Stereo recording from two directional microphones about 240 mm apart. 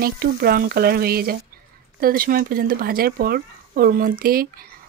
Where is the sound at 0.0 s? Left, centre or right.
Right.